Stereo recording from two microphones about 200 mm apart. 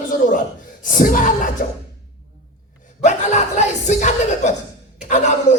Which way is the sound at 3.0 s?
35° left (ahead or behind).